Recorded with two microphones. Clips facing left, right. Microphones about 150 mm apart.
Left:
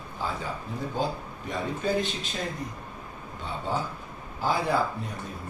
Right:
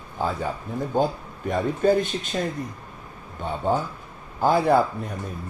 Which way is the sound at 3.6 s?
50° right (ahead or behind).